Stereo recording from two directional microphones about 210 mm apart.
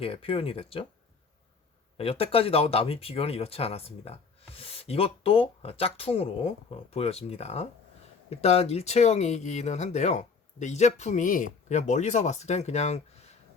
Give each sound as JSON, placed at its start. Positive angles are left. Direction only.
{"t": 0.0, "sound": "speech", "side_deg": 25}
{"t": 2.0, "sound": "speech", "side_deg": 25}